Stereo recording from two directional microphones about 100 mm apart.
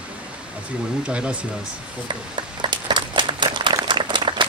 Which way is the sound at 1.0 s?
10° right (ahead or behind).